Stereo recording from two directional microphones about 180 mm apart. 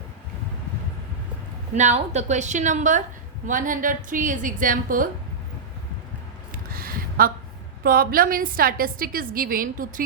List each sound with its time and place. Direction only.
1.7 s a woman's voice: 40° right (ahead or behind)
6.7 s a sound: 55° right (ahead or behind)
7.9 s a woman's voice: 55° right (ahead or behind)